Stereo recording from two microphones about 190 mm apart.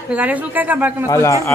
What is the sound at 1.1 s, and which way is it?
Speech, 15° left (ahead or behind).